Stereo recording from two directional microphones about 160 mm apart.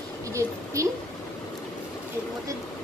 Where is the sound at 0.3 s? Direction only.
20° right (ahead or behind).